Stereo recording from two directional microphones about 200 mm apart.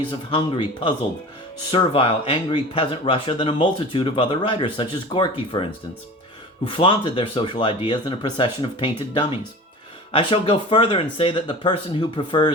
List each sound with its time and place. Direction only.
0.1 s speech: 25° left (ahead or behind)
6.7 s speech: 25° left (ahead or behind)